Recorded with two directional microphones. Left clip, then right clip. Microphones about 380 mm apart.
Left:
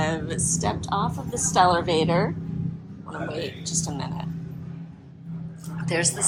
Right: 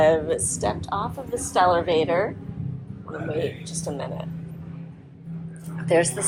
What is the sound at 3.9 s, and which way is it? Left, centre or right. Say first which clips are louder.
Speech: right 3 dB; centre.